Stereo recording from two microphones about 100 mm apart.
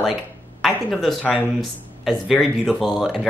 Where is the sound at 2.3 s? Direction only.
Centre (ahead or behind).